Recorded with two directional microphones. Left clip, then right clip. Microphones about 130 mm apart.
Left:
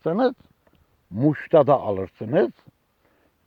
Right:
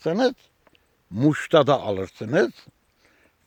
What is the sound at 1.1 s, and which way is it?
A man's voice, 20° right (ahead or behind).